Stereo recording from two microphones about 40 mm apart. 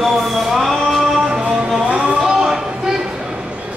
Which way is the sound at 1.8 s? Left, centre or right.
Right.